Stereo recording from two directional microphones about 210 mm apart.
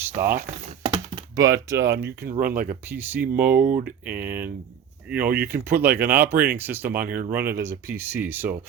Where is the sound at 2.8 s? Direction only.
10° right (ahead or behind).